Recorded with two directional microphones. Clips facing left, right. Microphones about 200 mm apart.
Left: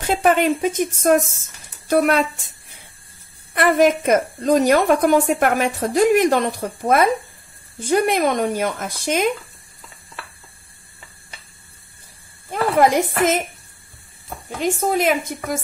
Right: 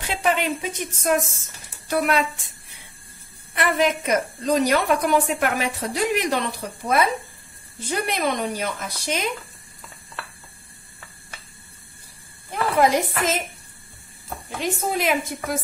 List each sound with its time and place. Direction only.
0.0 s a woman's voice: 45° left (ahead or behind)
3.5 s a woman's voice: 45° left (ahead or behind)
12.4 s a woman's voice: 50° left (ahead or behind)
14.9 s a woman's voice: 50° left (ahead or behind)